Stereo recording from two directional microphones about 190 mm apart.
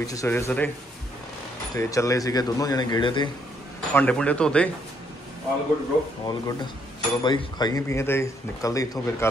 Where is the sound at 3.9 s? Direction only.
5° left (ahead or behind).